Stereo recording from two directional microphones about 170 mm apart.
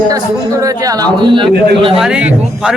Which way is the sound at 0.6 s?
20° right (ahead or behind).